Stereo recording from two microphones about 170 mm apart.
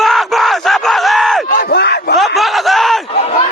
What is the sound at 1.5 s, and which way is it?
Crowd, 65° left (ahead or behind).